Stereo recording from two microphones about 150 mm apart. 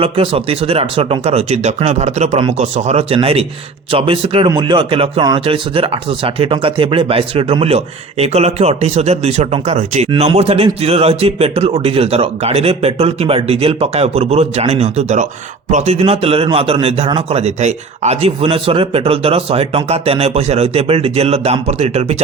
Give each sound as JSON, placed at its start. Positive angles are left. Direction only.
{"t": 0.0, "sound": "a man's voice", "side_deg": -40}